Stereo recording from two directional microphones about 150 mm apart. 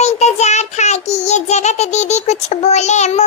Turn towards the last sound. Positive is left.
turn(degrees=50)  # may be behind; listen again after turning